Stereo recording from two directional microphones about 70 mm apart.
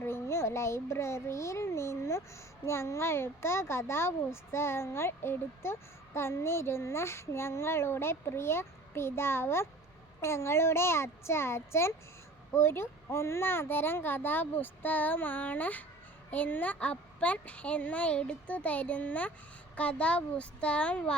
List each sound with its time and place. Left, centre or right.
0.0 s a child's voice: left; by 21.2 s centre